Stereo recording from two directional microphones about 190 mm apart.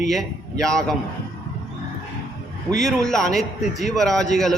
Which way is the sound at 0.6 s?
5° left (ahead or behind).